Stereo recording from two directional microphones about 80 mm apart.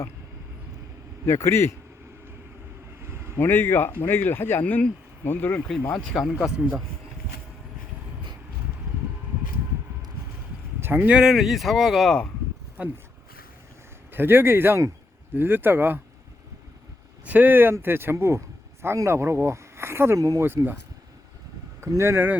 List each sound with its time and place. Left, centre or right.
1.3 s a man's voice: left
3.0 s vehicle: right
3.3 s speech: left
4.6 s speech: centre
5.9 s speech: centre
10.8 s a sound: right
11.0 s speech: centre
12.8 s speech: centre
14.1 s speech: right
17.2 s speech: right
20.6 s speech: right
21.8 s speech: right